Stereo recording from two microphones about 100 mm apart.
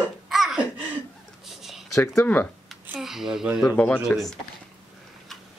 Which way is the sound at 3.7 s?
15° left (ahead or behind).